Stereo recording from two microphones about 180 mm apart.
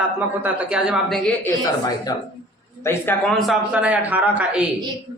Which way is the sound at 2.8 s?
15° left (ahead or behind).